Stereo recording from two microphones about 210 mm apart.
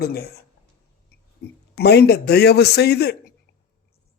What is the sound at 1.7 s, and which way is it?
Speech, 50° left (ahead or behind).